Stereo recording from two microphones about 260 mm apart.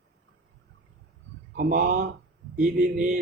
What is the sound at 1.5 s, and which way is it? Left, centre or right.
A man's voice, right.